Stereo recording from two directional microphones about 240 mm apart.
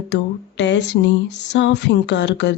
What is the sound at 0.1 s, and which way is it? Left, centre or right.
A woman's voice, left.